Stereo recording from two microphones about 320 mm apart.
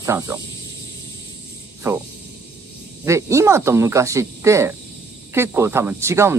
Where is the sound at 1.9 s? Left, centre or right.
Centre.